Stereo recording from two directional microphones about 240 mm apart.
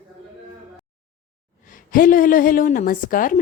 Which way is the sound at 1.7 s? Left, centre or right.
Left.